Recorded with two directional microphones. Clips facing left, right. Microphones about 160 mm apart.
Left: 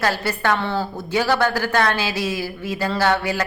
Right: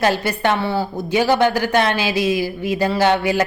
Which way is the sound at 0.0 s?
20° right (ahead or behind).